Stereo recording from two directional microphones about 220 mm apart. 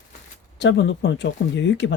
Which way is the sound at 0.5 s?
55° left (ahead or behind).